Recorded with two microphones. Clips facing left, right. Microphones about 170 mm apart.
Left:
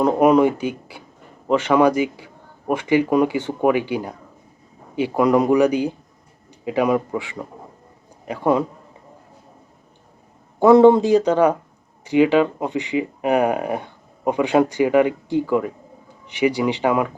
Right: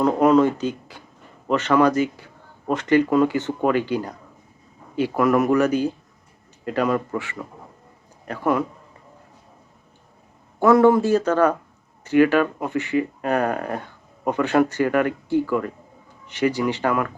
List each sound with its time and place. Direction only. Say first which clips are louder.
0.0 s speech: left 2 dB; 15° left (ahead or behind)
10.6 s speech: left 4 dB; 20° left (ahead or behind)